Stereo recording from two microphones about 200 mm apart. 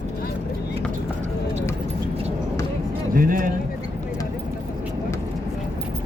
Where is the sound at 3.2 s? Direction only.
45° right (ahead or behind).